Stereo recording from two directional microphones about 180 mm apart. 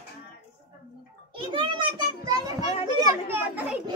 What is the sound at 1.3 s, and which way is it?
A child's voice, 25° right (ahead or behind).